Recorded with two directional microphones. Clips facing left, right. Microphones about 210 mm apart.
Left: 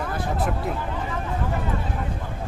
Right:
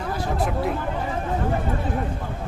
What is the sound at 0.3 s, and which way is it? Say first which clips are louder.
Speech: right 4 dB; centre (ahead or behind).